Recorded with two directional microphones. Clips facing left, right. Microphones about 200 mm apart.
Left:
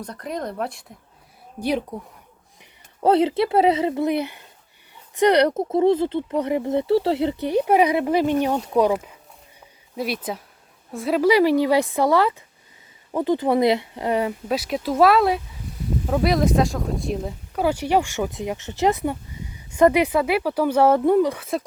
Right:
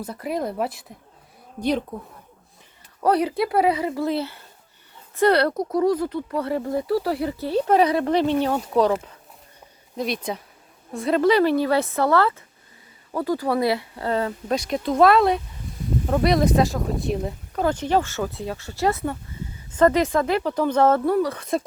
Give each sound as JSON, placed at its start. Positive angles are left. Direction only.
{"t": 0.0, "sound": "speech", "side_deg": -5}
{"t": 3.0, "sound": "speech", "side_deg": 25}
{"t": 21.3, "sound": "speech", "side_deg": 0}